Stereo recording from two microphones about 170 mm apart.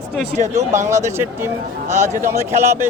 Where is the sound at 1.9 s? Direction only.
45° right (ahead or behind).